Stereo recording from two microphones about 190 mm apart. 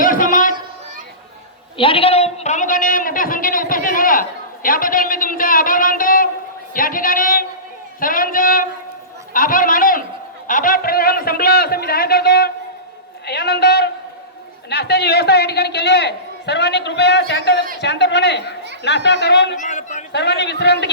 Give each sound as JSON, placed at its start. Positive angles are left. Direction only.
{"t": 0.0, "sound": "a sound", "side_deg": 45}
{"t": 1.8, "sound": "a man's voice", "side_deg": 30}
{"t": 19.5, "sound": "a man's voice", "side_deg": 40}
{"t": 20.1, "sound": "a man's voice", "side_deg": 65}